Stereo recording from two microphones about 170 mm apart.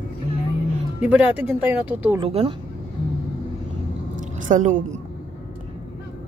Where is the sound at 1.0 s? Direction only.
5° right (ahead or behind).